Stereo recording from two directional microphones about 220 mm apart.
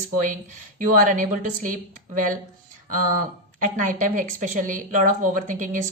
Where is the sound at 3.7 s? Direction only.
35° right (ahead or behind).